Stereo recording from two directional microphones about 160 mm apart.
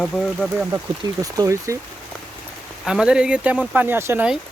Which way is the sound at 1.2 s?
20° right (ahead or behind).